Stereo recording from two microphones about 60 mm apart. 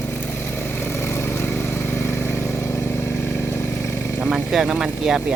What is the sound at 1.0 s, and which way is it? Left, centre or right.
Vehicle, left.